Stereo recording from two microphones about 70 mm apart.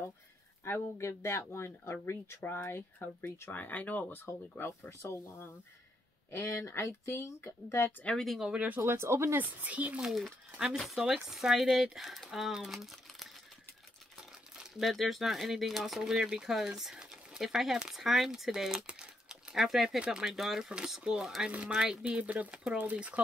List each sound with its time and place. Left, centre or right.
0.7 s speech: left
8.0 s speech: centre
8.3 s speech: centre
8.6 s speech: right
9.4 s speech: right
10.0 s speech: centre
14.6 s speech: centre
21.5 s speech: centre